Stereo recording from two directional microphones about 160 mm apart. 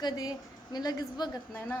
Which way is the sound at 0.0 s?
25° left (ahead or behind).